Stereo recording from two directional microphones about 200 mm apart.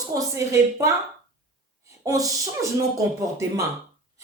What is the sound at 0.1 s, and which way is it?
Speech, 15° right (ahead or behind).